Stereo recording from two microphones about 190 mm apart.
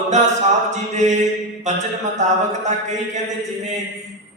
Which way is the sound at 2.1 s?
40° right (ahead or behind).